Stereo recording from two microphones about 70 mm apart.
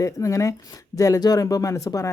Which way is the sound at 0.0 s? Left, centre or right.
Left.